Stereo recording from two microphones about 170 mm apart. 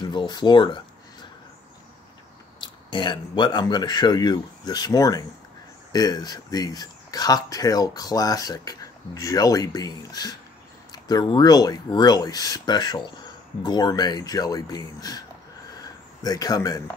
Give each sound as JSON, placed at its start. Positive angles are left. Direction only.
{"t": 0.0, "sound": "speech", "side_deg": 25}
{"t": 2.6, "sound": "speech", "side_deg": 25}